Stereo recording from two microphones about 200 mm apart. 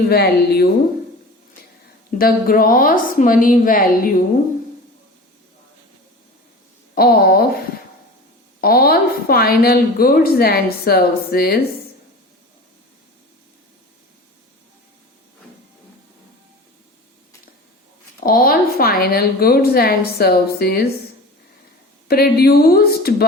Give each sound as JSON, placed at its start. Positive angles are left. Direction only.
{"t": 0.1, "sound": "a woman's voice", "side_deg": 50}
{"t": 2.0, "sound": "a woman's voice", "side_deg": 45}
{"t": 6.9, "sound": "a woman's voice", "side_deg": 50}
{"t": 8.6, "sound": "a woman's voice", "side_deg": 50}
{"t": 18.2, "sound": "a woman's voice", "side_deg": 45}
{"t": 22.0, "sound": "a woman's voice", "side_deg": 50}